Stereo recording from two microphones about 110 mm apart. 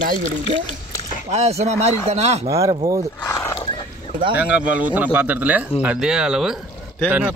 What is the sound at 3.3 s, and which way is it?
Wild animals, 25° left (ahead or behind).